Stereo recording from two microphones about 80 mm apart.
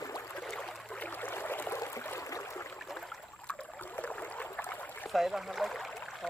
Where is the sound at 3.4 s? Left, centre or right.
Centre.